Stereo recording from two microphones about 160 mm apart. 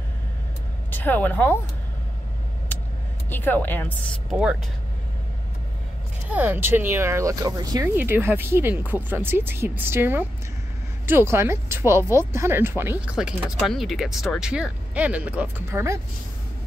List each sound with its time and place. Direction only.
0.9 s speech: 10° left (ahead or behind)
3.3 s speech: 10° left (ahead or behind)
4.3 s speech: 5° right (ahead or behind)
6.2 s speech: 10° right (ahead or behind)
7.9 s speech: 10° right (ahead or behind)